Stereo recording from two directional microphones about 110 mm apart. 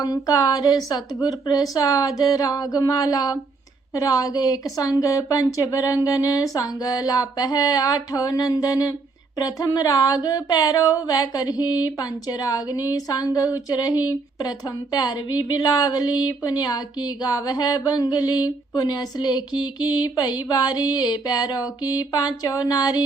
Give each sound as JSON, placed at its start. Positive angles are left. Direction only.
{"t": 0.0, "sound": "a woman's voice", "side_deg": 30}